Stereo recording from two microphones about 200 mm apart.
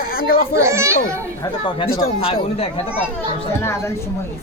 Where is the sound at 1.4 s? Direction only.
20° left (ahead or behind).